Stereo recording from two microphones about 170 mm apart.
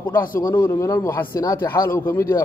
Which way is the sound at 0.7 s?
20° left (ahead or behind).